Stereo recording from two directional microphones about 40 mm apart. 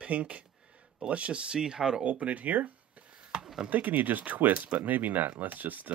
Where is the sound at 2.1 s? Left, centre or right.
Right.